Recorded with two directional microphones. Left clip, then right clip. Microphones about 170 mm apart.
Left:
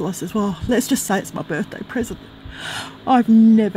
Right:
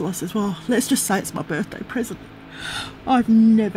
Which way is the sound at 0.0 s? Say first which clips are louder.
Left 2 dB; 25° left (ahead or behind).